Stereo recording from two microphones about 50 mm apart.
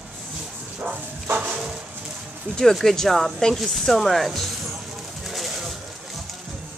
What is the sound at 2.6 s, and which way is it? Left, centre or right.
Speech, centre.